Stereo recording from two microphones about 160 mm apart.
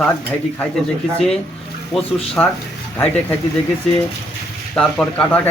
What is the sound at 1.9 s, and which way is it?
Speech, 5° left (ahead or behind).